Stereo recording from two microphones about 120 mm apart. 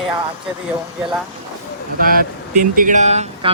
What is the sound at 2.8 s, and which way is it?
Speech, 85° right.